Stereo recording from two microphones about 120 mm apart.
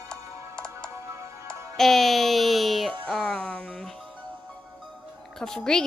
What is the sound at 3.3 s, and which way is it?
Speech, 10° left (ahead or behind).